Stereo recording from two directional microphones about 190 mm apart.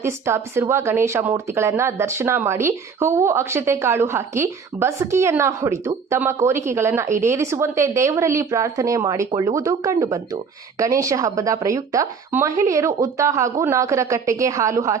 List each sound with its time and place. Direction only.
0.0 s speech: 15° right (ahead or behind)